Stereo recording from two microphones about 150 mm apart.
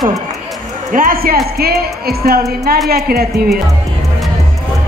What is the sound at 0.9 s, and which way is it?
A woman's voice, 65° right (ahead or behind).